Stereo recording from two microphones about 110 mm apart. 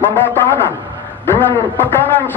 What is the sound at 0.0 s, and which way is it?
A man's voice, 20° left (ahead or behind).